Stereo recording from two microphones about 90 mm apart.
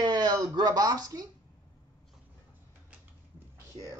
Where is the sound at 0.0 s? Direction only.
50° right (ahead or behind).